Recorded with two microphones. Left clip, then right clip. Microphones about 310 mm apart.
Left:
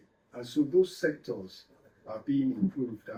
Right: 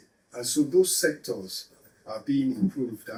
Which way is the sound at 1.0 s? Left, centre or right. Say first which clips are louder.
Right 5 dB; centre.